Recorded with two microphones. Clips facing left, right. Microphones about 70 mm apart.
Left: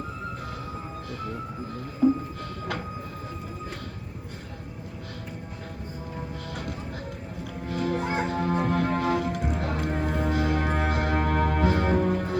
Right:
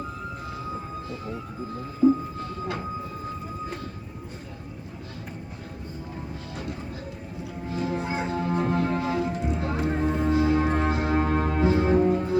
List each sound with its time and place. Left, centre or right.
7.7 s music: left